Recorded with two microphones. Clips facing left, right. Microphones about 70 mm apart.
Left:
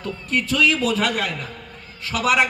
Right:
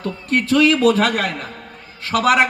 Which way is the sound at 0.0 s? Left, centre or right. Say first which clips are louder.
Right 4 dB; right.